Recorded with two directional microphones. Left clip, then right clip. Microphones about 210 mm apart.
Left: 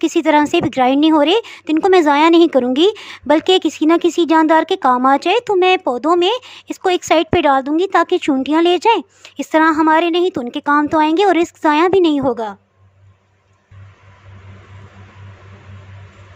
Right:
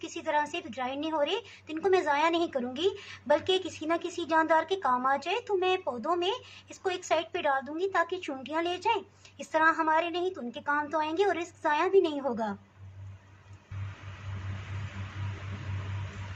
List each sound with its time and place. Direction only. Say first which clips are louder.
0.0 s speech: left 17 dB; 50° left (ahead or behind)